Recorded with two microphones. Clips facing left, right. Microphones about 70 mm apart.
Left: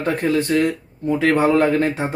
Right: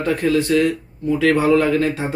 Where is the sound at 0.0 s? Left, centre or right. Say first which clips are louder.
Right 1 dB; left.